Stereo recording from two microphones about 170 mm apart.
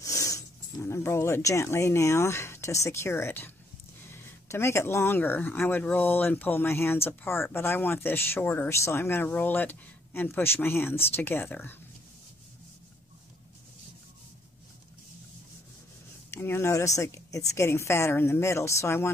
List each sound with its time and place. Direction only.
0.0 s speech: 20° left (ahead or behind)
16.3 s speech: 15° left (ahead or behind)